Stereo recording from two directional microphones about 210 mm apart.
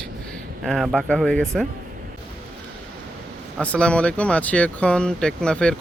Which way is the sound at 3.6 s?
5° left (ahead or behind).